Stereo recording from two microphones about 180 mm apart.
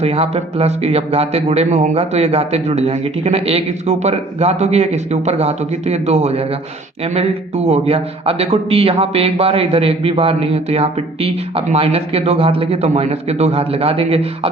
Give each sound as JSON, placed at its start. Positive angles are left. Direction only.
{"t": 0.0, "sound": "a man's voice", "side_deg": -35}